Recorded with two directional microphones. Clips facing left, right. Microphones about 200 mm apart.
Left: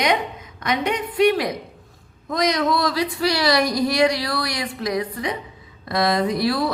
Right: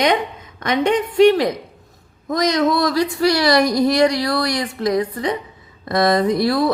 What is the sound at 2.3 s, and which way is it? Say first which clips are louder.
Speech: right 3 dB; 45° right (ahead or behind).